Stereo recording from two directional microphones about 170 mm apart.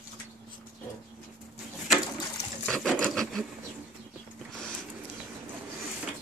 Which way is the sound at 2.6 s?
5° left (ahead or behind).